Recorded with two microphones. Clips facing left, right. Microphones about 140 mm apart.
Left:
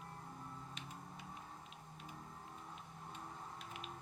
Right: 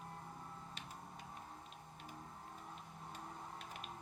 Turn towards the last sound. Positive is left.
turn(degrees=-45)  # may be behind; listen again after turning